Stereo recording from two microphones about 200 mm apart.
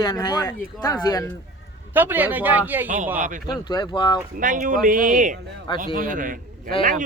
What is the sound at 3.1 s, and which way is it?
Speech, 40° right (ahead or behind).